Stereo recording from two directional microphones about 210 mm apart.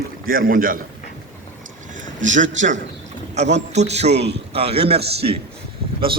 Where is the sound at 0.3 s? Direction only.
45° right (ahead or behind).